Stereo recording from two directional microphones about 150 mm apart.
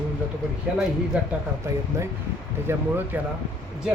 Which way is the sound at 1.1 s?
10° right (ahead or behind).